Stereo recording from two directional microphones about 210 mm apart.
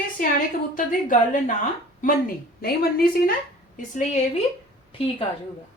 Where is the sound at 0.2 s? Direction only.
40° left (ahead or behind).